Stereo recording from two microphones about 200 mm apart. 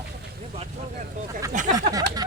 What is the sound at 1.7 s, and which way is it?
Speech, 20° right (ahead or behind).